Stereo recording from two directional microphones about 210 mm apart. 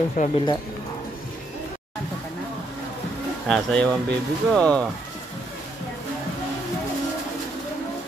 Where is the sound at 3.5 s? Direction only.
5° left (ahead or behind).